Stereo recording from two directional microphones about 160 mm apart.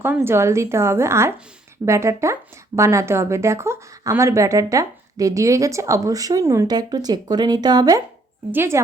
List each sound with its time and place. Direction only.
0.0 s a woman's voice: 15° right (ahead or behind)